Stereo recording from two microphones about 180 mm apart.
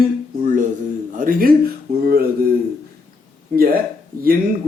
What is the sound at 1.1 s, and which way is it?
Speech, 50° right (ahead or behind).